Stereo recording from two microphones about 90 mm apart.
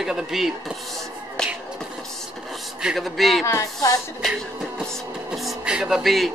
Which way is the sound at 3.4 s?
30° left (ahead or behind).